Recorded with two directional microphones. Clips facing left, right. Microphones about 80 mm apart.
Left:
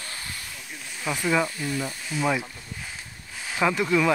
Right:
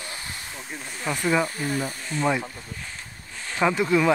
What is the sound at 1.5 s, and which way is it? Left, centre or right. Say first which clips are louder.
Speech: right 2 dB; right.